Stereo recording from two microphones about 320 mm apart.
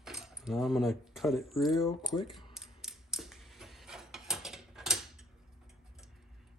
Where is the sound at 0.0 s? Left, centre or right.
Centre.